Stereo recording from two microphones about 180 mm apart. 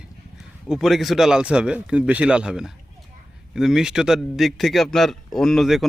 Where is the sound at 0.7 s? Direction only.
Centre (ahead or behind).